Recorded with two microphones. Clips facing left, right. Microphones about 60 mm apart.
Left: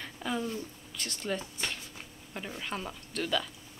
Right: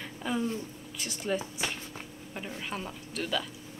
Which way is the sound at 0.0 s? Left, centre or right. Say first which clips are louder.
Right 2 dB; centre.